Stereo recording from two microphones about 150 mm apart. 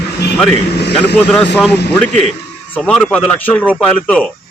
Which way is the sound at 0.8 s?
90° left.